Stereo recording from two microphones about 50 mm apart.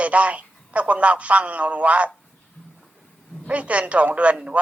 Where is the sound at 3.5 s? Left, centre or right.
Right.